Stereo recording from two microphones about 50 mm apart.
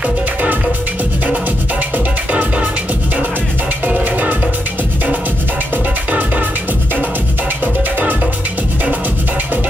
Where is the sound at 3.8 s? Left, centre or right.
Right.